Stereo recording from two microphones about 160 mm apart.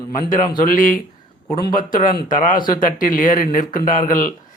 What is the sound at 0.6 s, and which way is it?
Speech, 55° left (ahead or behind).